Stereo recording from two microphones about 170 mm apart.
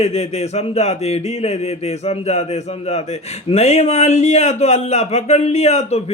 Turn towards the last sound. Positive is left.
turn(degrees=40)  # may be behind; listen again after turning